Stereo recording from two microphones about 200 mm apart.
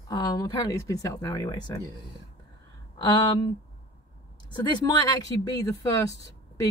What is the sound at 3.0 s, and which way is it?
Speech, 20° left (ahead or behind).